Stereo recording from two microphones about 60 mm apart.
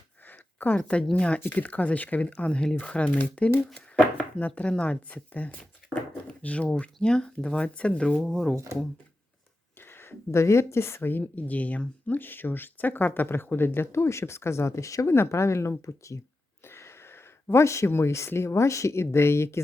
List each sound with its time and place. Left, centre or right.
0.3 s a sound: left
0.8 s speech: centre
8.3 s speech: centre
8.5 s speech: right
9.8 s speech: left
15.1 s speech: left
16.6 s a sound: left
18.3 s speech: left